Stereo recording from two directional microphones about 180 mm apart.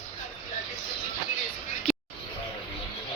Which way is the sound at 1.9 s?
Centre (ahead or behind).